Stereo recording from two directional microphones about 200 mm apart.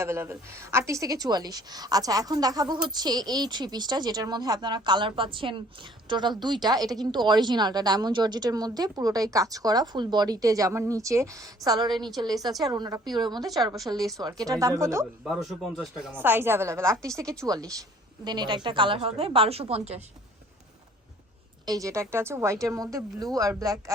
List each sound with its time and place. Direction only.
0.0 s a woman's voice: 15° right (ahead or behind)
15.2 s a woman's voice: centre (ahead or behind); by 20.0 s 30° right (ahead or behind)
21.7 s a woman's voice: 15° right (ahead or behind)